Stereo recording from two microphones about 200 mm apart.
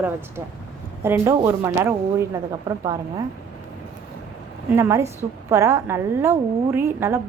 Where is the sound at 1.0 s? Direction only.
10° right (ahead or behind).